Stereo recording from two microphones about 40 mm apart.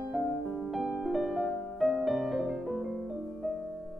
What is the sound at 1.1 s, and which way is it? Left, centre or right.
Music, centre.